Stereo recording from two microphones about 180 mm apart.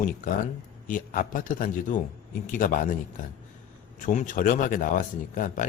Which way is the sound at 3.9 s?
45° left (ahead or behind).